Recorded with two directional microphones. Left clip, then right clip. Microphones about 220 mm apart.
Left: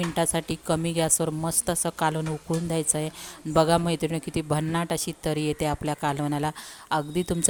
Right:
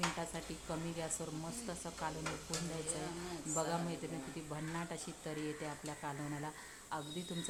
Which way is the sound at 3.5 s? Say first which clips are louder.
Left 18 dB; 45° left (ahead or behind).